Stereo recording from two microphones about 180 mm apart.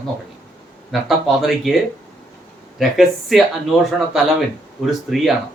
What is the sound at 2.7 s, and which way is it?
Speech, centre (ahead or behind).